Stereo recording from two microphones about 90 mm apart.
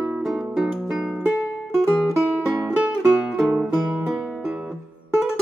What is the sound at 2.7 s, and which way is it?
Music, 15° right (ahead or behind).